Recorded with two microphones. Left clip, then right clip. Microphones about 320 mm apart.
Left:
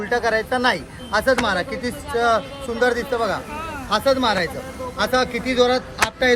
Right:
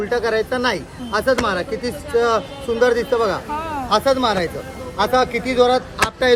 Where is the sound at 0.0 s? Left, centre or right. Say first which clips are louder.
Right 1 dB; centre.